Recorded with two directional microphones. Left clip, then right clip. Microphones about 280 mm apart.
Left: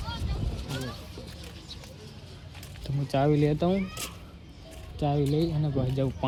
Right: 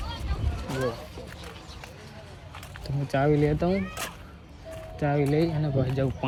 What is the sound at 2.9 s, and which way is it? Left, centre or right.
Speech, centre.